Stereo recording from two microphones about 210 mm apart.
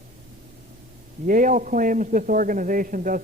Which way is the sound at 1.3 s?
40° right (ahead or behind).